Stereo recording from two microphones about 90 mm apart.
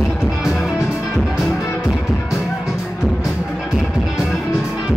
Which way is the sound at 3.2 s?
5° right (ahead or behind).